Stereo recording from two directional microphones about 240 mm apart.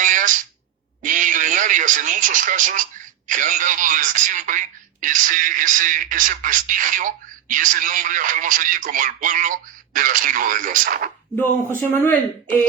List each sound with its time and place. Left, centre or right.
0.0 s a sound: right
1.0 s a woman's voice: right
11.3 s a man's voice: centre